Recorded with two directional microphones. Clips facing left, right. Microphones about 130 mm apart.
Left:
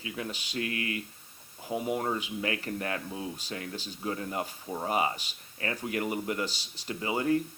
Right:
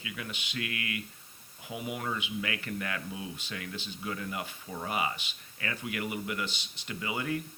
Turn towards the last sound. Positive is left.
turn(degrees=35)  # may be behind; listen again after turning